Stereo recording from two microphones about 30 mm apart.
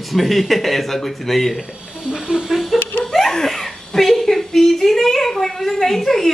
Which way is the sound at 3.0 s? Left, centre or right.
Centre.